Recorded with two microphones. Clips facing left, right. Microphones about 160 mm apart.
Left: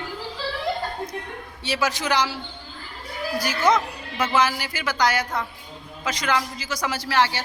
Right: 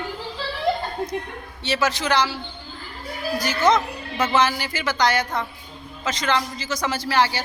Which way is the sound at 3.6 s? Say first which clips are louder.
Right 2 dB; 10° left (ahead or behind).